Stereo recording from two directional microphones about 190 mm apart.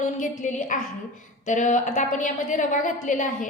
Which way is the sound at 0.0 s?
40° left (ahead or behind).